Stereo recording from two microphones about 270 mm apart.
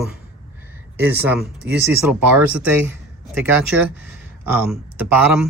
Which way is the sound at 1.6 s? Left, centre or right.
Centre.